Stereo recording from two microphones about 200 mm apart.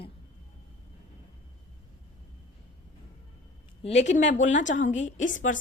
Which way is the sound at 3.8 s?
35° left (ahead or behind).